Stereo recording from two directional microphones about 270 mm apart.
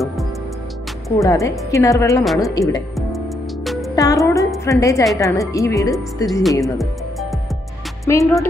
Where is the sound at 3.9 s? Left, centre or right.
Centre.